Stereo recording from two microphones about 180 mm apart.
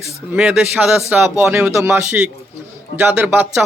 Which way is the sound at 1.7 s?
15° right (ahead or behind).